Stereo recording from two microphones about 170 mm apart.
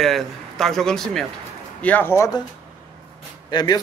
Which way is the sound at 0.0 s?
Centre (ahead or behind).